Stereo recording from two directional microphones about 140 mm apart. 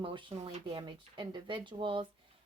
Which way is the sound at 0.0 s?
35° right (ahead or behind).